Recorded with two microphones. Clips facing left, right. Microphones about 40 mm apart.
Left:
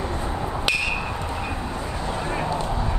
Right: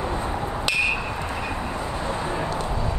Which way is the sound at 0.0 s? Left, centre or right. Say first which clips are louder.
Right 1 dB; right.